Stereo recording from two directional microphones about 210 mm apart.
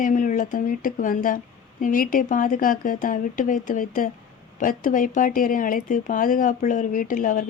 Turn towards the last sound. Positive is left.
turn(degrees=40)  # may be behind; listen again after turning